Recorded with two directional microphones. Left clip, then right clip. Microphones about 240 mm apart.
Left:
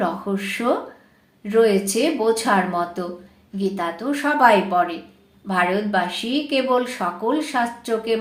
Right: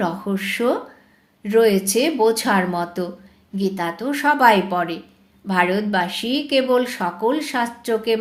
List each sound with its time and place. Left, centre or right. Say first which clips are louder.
0.0 s speech: even; right